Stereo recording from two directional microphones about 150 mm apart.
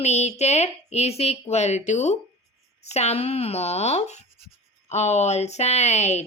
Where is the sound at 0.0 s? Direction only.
45° left (ahead or behind).